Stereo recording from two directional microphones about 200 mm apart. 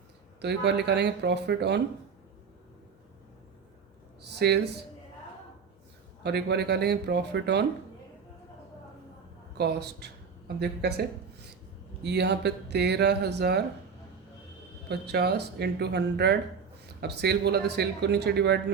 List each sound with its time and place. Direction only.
0.4 s speech: 55° right (ahead or behind)
4.3 s speech: 55° right (ahead or behind)
6.2 s speech: 55° right (ahead or behind)
9.6 s speech: 55° right (ahead or behind)
12.0 s speech: 55° right (ahead or behind)
14.8 s speech: 55° right (ahead or behind)